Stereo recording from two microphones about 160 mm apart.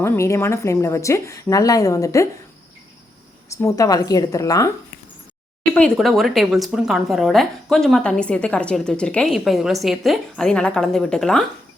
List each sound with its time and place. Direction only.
0.0 s speech: 15° left (ahead or behind)
3.5 s speech: 20° left (ahead or behind)
5.7 s speech: 5° left (ahead or behind)